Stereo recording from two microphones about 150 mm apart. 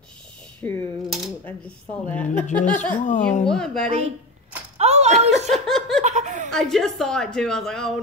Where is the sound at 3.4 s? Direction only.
5° left (ahead or behind).